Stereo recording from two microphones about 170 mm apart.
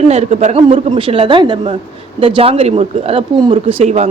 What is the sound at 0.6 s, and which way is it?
A woman's voice, 30° right (ahead or behind).